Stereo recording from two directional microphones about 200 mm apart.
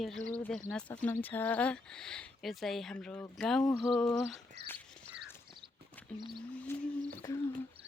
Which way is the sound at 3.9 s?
5° left (ahead or behind).